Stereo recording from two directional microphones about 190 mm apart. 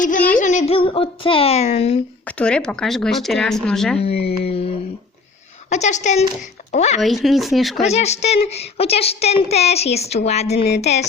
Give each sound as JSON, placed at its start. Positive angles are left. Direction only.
{"t": 0.3, "sound": "a woman's voice", "side_deg": 40}
{"t": 2.2, "sound": "speech", "side_deg": 5}
{"t": 4.4, "sound": "a woman's voice", "side_deg": 30}
{"t": 7.0, "sound": "speech", "side_deg": 0}
{"t": 7.8, "sound": "a woman's voice", "side_deg": 35}